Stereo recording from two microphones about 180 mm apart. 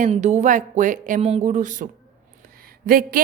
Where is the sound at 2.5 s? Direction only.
55° right (ahead or behind).